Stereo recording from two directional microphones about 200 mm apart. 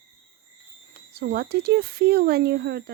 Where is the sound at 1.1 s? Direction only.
50° right (ahead or behind).